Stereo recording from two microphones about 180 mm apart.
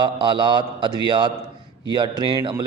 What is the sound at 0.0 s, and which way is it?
A man's voice, 25° right (ahead or behind).